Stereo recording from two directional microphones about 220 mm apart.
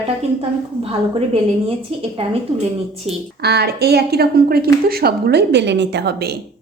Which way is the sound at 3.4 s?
45° right (ahead or behind).